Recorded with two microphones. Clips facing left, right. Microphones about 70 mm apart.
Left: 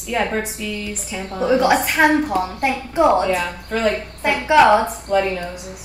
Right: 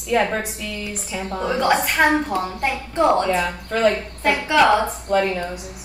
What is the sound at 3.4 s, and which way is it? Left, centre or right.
Speech, centre.